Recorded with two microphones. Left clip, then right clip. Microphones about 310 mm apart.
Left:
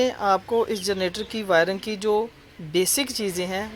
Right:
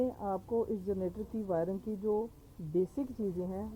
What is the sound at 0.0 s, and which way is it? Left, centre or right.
Speech, left.